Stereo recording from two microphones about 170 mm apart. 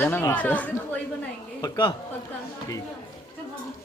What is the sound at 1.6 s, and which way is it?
Speech, 30° left (ahead or behind).